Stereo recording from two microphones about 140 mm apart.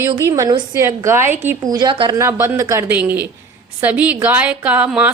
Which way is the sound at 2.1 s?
20° right (ahead or behind).